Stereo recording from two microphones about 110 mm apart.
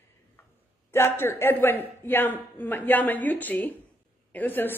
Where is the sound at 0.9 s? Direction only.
25° left (ahead or behind).